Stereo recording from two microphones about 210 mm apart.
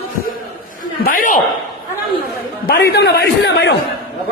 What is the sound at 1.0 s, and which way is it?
Speech, 40° left (ahead or behind).